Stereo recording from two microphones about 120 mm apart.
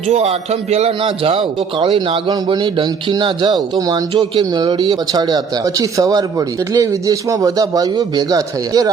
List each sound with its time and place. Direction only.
0.1 s a man's voice: 60° right (ahead or behind); by 8.9 s 30° right (ahead or behind)